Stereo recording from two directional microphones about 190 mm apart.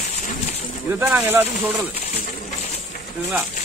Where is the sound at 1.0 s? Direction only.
10° right (ahead or behind).